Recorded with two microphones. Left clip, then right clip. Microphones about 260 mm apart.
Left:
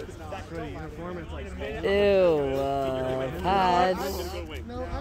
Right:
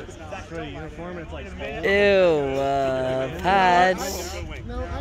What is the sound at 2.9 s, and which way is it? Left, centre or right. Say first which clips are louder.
Speech: right 5 dB; right.